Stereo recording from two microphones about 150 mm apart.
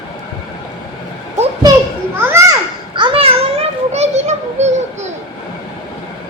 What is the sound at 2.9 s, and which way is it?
Children playing, 35° right (ahead or behind).